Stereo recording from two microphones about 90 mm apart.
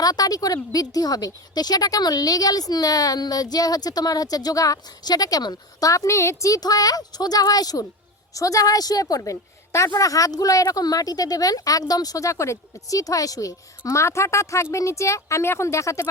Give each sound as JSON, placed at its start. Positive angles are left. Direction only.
{"t": 0.0, "sound": "a woman's voice", "side_deg": 45}